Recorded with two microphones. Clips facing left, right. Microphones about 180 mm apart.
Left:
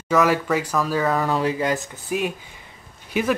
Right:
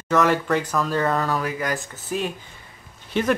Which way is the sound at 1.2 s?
25° left (ahead or behind).